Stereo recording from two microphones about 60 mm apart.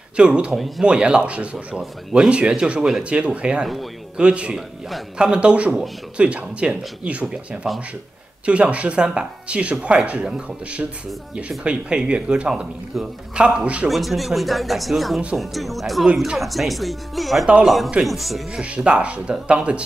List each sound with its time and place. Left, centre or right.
0.1 s speech: centre
4.6 s speech: centre
5.1 s speech: centre
7.7 s speech: centre
8.5 s speech: right
13.8 s speech: centre
18.6 s speech: centre